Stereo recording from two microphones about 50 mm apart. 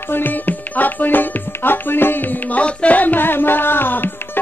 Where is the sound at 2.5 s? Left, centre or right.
Left.